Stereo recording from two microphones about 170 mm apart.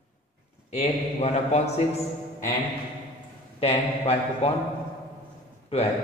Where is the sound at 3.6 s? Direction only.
35° left (ahead or behind).